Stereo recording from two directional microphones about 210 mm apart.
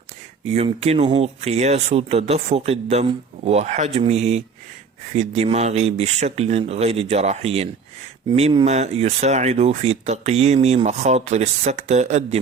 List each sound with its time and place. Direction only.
0.4 s speech: 30° right (ahead or behind)